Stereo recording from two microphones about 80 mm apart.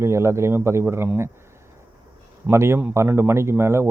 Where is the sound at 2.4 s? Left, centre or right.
Right.